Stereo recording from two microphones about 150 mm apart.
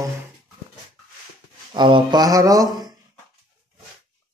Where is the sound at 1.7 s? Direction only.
30° right (ahead or behind).